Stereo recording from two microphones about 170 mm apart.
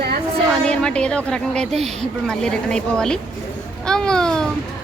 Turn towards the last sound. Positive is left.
turn(degrees=5)  # may be behind; listen again after turning